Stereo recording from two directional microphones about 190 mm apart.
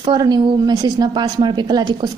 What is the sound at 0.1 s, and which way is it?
A woman's voice, 20° right (ahead or behind).